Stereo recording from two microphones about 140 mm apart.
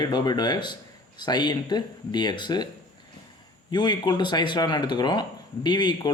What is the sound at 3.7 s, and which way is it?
Speech, 30° left (ahead or behind).